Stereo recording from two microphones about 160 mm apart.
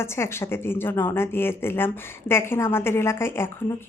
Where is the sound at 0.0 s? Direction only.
15° left (ahead or behind).